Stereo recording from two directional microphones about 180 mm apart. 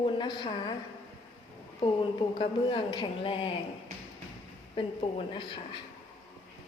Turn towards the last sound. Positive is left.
turn(degrees=30)  # may be behind; listen again after turning